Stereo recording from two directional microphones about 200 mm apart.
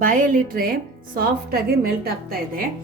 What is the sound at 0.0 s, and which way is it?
A woman's voice, 40° right (ahead or behind).